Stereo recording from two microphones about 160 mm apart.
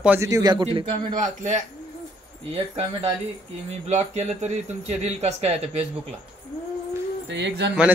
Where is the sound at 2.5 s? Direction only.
40° right (ahead or behind).